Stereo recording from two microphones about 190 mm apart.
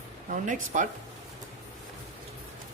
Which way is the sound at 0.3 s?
40° right (ahead or behind).